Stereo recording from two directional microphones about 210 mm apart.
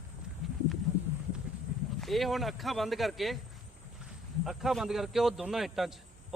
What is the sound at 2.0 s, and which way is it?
Speech, centre (ahead or behind).